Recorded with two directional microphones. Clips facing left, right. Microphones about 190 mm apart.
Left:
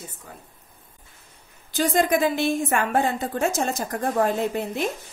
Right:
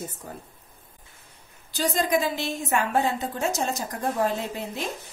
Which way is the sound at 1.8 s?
55° left (ahead or behind).